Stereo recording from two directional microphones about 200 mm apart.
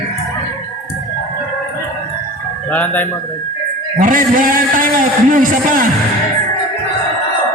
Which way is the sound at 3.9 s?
40° right (ahead or behind).